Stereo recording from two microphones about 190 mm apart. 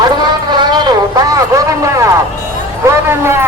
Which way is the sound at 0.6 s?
20° right (ahead or behind).